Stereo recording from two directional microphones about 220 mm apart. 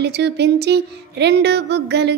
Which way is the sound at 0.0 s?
50° right (ahead or behind).